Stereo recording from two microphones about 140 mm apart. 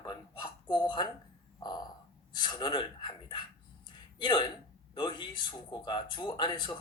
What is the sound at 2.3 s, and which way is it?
Speech, 30° left (ahead or behind).